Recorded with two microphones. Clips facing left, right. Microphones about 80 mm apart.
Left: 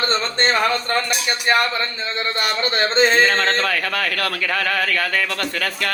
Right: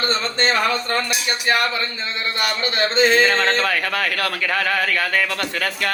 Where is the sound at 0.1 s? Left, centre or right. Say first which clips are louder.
Left 1 dB; left.